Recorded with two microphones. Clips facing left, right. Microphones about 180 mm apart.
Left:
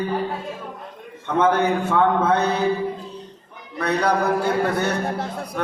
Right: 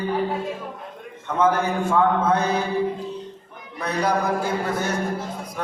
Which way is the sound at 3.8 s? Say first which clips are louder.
Left 2 dB; 65° left (ahead or behind).